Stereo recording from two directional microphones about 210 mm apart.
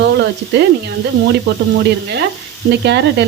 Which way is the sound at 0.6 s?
55° right (ahead or behind).